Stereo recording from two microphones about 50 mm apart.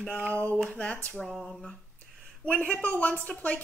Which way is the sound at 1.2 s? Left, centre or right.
Centre.